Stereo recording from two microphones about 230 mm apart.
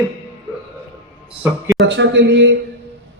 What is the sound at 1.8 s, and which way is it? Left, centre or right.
Speech, right.